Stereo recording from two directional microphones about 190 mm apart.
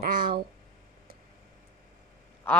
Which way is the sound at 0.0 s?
50° right (ahead or behind).